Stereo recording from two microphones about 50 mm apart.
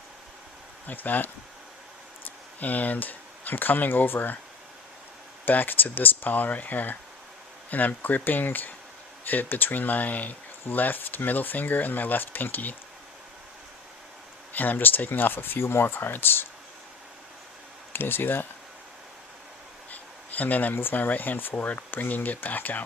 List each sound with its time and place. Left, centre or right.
0.9 s speech: left
2.6 s speech: left
5.5 s speech: left
14.5 s speech: left
17.9 s speech: left
19.9 s a sound: left
20.7 s speech: left